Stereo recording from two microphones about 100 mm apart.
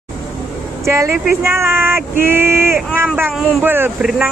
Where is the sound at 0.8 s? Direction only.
30° right (ahead or behind).